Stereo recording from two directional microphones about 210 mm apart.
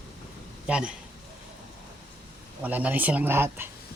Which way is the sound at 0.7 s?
5° right (ahead or behind).